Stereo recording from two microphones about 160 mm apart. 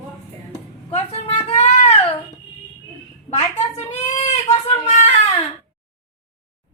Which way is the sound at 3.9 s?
45° left (ahead or behind).